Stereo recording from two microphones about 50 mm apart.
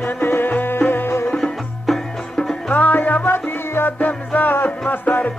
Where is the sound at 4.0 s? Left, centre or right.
Left.